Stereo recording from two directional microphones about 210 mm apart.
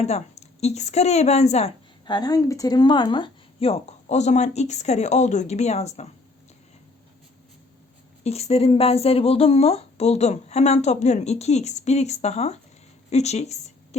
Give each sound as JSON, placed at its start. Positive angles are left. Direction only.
{"t": 0.0, "sound": "speech", "side_deg": 30}
{"t": 8.2, "sound": "speech", "side_deg": 30}